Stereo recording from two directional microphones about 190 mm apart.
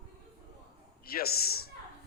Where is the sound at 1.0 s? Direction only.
55° left (ahead or behind).